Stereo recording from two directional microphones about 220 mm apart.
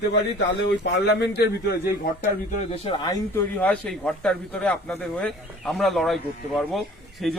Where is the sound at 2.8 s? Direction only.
25° left (ahead or behind).